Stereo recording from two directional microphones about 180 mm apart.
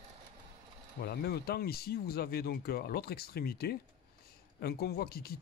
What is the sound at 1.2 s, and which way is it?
Speech, 60° left (ahead or behind).